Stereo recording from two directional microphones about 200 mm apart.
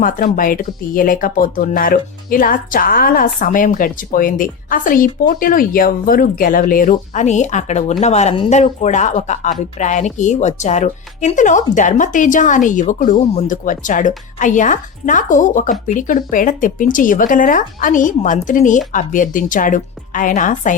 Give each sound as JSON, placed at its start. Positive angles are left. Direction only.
{"t": 0.3, "sound": "speech", "side_deg": 45}